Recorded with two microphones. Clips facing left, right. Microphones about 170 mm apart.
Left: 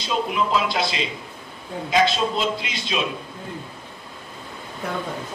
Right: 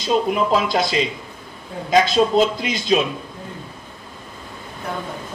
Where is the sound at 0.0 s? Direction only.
45° right (ahead or behind).